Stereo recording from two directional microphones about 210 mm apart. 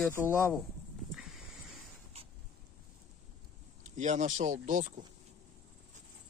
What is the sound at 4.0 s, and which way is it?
Speech, 35° right (ahead or behind).